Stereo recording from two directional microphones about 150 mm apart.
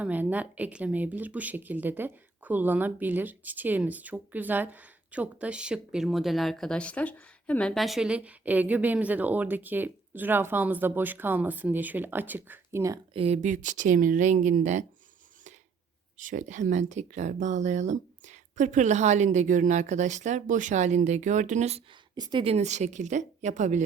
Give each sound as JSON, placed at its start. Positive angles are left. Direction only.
{"t": 0.0, "sound": "speech", "side_deg": -10}
{"t": 13.1, "sound": "speech", "side_deg": -45}
{"t": 16.1, "sound": "speech", "side_deg": -55}
{"t": 22.1, "sound": "speech", "side_deg": -30}
{"t": 22.5, "sound": "speech", "side_deg": -50}